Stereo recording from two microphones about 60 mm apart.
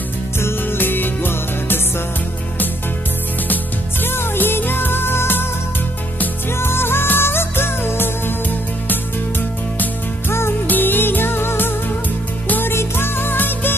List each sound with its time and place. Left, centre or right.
0.4 s music: left
4.0 s music: left
6.6 s music: left
10.7 s music: left